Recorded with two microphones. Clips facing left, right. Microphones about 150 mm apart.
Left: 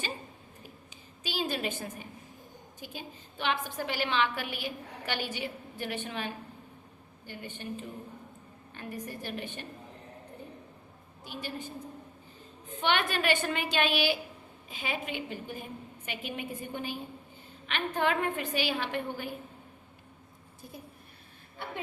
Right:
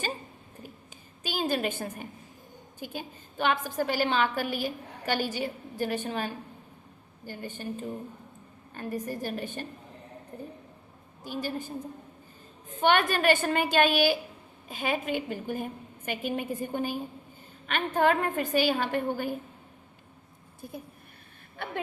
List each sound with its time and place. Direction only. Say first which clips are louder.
1.2 s a woman's voice: right 4 dB; 45° right (ahead or behind)
11.2 s a woman's voice: right 6 dB; 40° right (ahead or behind)
12.8 s a woman's voice: right 5 dB; 45° right (ahead or behind)